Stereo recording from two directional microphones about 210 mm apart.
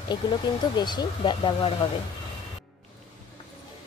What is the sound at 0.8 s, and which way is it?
Speech, 20° left (ahead or behind).